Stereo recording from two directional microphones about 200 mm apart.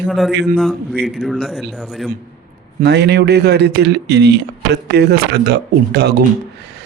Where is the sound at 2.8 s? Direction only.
55° right (ahead or behind).